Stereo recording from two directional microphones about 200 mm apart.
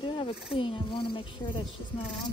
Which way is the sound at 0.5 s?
25° left (ahead or behind).